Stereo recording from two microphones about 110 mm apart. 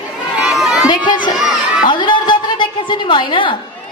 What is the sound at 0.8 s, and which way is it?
A woman's voice, 45° left (ahead or behind).